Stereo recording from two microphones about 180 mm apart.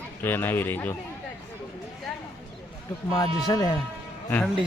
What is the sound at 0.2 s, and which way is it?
Speech, 10° left (ahead or behind).